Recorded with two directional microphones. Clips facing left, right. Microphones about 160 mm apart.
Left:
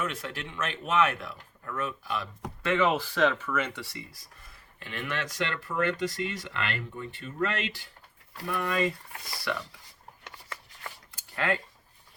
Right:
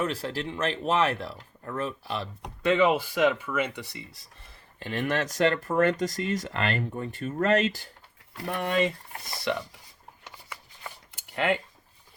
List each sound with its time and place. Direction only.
0.0 s speech: 35° right (ahead or behind)
2.4 s speech: 15° right (ahead or behind)
4.8 s speech: 35° right (ahead or behind)
8.4 s speech: 25° right (ahead or behind)
11.1 s a sound: 20° right (ahead or behind)